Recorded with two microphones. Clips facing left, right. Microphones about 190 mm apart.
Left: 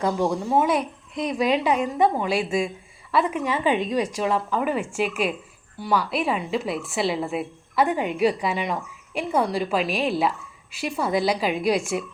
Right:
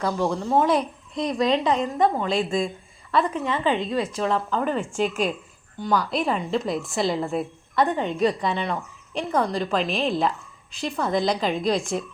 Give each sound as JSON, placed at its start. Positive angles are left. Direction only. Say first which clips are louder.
{"t": 0.0, "sound": "a woman's voice", "louder": "left 1 dB", "side_deg": 15}